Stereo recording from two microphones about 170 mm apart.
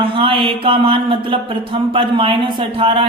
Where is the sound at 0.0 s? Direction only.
30° right (ahead or behind).